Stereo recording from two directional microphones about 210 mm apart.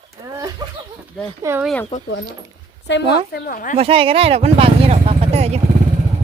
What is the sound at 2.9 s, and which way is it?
Speech, 50° left (ahead or behind).